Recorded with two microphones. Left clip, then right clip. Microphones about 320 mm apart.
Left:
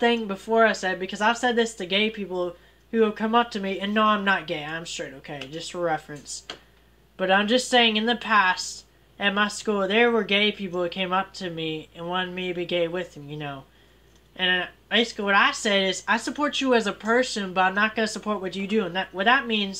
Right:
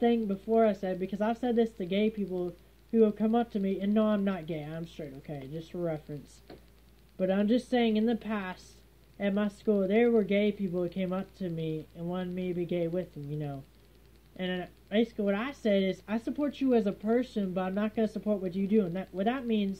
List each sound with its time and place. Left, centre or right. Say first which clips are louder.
0.0 s speech: left 6 dB; left
7.2 s speech: left 8 dB; left
9.3 s speech: left 5 dB; centre
9.8 s speech: left 7 dB; left